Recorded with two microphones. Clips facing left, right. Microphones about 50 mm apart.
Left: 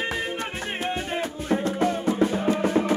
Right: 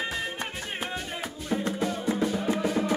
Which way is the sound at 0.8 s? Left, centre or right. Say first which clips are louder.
Left 8 dB; left.